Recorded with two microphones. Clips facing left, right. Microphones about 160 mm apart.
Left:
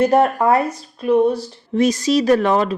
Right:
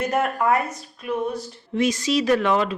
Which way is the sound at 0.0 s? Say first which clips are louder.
Left 8 dB; 35° left (ahead or behind).